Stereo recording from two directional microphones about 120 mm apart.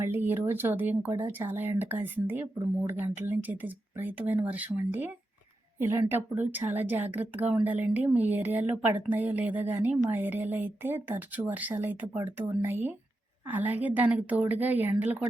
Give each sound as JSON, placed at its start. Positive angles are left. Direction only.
{"t": 0.0, "sound": "a woman's voice", "side_deg": -20}